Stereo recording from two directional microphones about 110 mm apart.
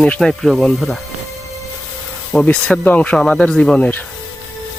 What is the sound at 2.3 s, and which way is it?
Speech, 10° left (ahead or behind).